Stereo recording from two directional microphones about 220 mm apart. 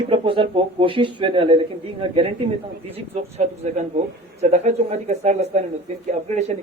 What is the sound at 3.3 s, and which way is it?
A man's voice, 30° right (ahead or behind).